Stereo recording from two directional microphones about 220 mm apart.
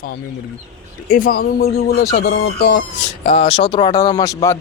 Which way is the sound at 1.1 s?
40° left (ahead or behind).